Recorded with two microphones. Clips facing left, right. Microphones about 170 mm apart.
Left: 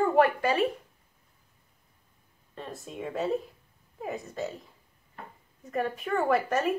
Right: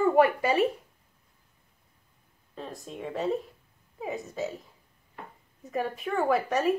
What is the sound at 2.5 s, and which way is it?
A woman's voice, centre (ahead or behind).